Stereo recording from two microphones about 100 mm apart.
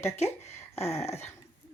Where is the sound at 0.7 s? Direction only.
90° left.